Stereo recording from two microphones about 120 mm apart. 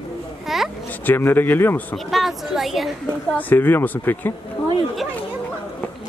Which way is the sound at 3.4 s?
15° left (ahead or behind).